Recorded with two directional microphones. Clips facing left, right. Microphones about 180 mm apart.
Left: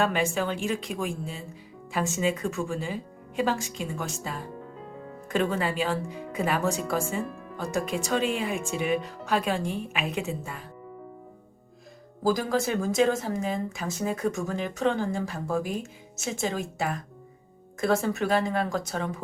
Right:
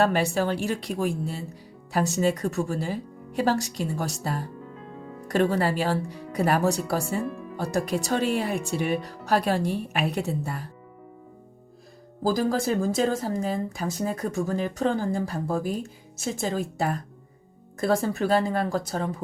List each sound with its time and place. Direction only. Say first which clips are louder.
0.0 s speech: right 3 dB; 40° right (ahead or behind)
12.2 s speech: right 1 dB; 35° right (ahead or behind)